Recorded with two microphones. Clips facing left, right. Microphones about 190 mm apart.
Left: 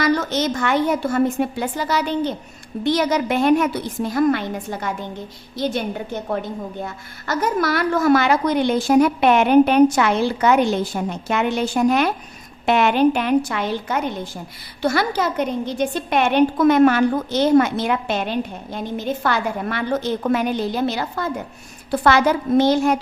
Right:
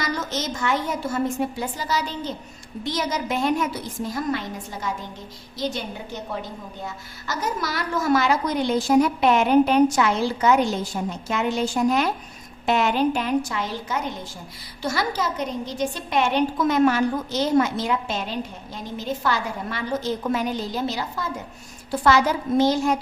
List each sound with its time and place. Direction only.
0.0 s a woman's voice: 65° left (ahead or behind)
6.8 s a woman's voice: 60° left (ahead or behind)